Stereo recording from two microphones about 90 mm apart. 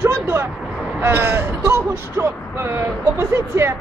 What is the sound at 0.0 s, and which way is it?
Vehicle, 30° right (ahead or behind).